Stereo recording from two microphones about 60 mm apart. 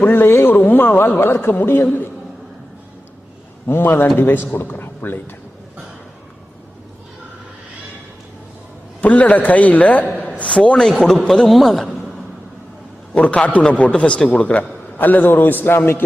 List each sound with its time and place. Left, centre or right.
0.0 s speech: left
3.7 s a man's voice: left
9.0 s a man's voice: left; by 11.9 s centre
13.1 s a man's voice: left